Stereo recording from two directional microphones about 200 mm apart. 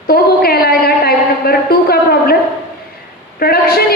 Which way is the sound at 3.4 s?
50° left (ahead or behind).